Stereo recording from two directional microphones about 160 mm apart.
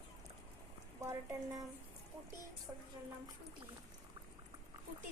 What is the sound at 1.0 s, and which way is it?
Speech, 20° right (ahead or behind).